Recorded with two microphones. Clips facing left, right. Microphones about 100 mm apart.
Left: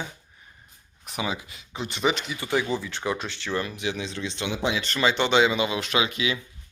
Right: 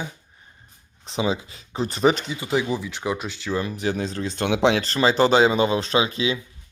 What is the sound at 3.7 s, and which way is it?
Speech, 40° right (ahead or behind).